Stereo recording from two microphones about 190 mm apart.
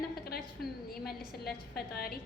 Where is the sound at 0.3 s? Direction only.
55° left (ahead or behind).